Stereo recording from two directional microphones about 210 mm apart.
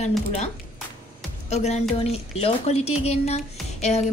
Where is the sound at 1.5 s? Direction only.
30° left (ahead or behind).